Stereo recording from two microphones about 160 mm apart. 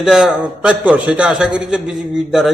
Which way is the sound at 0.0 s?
5° right (ahead or behind).